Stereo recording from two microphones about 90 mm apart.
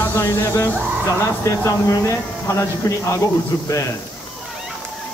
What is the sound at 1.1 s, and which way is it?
Speech, 35° left (ahead or behind).